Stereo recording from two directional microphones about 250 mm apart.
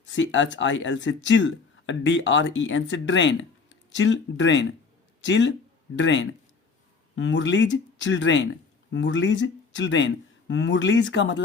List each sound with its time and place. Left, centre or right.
0.0 s speech: left